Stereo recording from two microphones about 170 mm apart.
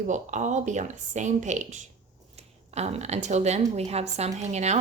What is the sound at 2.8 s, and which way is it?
A woman's voice, 40° right (ahead or behind).